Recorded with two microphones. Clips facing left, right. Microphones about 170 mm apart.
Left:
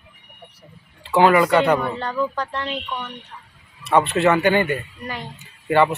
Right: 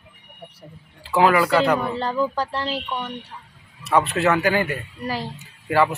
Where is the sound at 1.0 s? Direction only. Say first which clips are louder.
Left 2 dB; centre (ahead or behind).